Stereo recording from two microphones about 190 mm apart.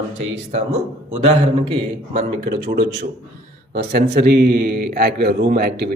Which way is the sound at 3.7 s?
55° right (ahead or behind).